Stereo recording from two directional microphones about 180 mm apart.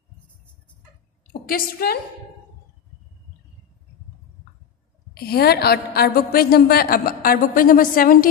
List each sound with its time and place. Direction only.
1.4 s a woman's voice: 55° left (ahead or behind)
5.1 s a woman's voice: 60° left (ahead or behind)